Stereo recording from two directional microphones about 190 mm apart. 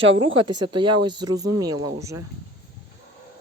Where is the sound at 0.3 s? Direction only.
25° right (ahead or behind).